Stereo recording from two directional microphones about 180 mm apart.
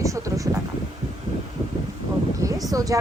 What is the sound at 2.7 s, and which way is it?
Speech, 20° right (ahead or behind).